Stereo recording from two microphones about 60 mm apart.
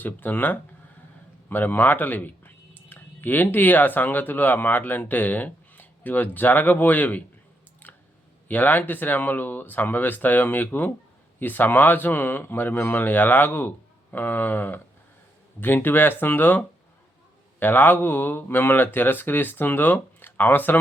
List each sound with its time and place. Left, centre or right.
0.0 s speech: left
8.4 s speech: left